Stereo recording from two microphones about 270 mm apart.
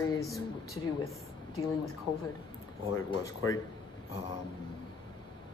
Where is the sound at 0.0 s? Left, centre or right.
Centre.